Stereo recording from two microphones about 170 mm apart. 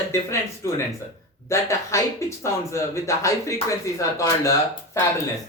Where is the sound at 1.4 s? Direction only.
15° left (ahead or behind).